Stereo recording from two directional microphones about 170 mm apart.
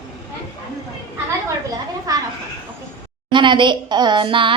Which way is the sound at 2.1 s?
20° right (ahead or behind).